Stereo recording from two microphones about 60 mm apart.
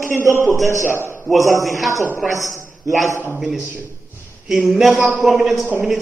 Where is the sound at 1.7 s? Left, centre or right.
Centre.